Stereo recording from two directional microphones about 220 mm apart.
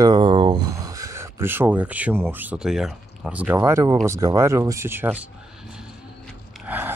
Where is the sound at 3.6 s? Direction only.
20° right (ahead or behind).